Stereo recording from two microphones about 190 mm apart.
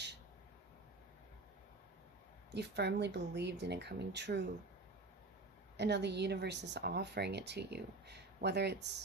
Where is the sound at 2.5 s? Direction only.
65° right (ahead or behind).